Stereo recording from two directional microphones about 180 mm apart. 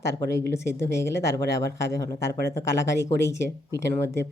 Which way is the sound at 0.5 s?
15° left (ahead or behind).